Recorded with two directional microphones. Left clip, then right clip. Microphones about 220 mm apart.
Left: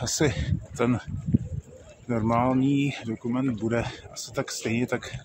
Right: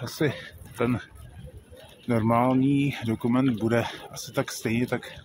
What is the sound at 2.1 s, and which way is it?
Speech, 10° right (ahead or behind).